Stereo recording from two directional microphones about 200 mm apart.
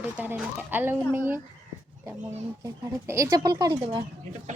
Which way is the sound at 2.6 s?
15° right (ahead or behind).